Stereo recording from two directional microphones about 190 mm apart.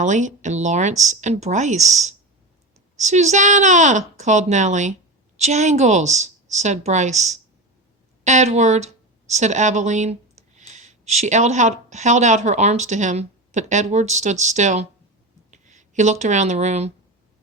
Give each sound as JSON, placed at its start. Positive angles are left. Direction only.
{"t": 0.0, "sound": "a woman's voice", "side_deg": -40}